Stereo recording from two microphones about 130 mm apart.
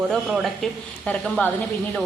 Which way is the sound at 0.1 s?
Centre (ahead or behind).